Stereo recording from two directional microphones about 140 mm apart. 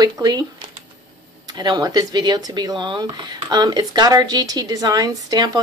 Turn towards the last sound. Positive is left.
turn(degrees=-25)  # may be behind; listen again after turning